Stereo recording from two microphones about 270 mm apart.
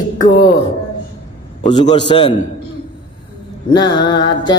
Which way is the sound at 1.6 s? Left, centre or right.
Centre.